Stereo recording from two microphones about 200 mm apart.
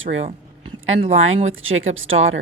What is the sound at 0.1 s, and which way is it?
A woman's voice, 75° right (ahead or behind).